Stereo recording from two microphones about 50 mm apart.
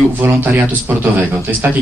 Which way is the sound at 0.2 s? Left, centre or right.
Right.